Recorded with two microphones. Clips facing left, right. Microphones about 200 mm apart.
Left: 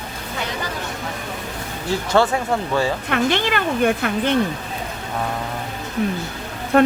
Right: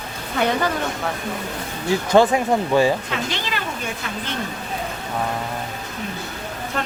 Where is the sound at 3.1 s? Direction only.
60° left (ahead or behind).